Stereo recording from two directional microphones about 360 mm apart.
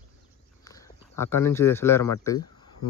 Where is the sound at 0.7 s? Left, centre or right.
Centre.